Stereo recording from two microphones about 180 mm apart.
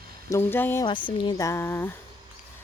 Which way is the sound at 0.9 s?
25° left (ahead or behind).